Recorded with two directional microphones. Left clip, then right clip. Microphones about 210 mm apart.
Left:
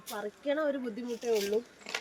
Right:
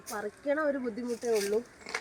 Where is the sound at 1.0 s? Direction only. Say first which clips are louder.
Right 1 dB; 20° left (ahead or behind).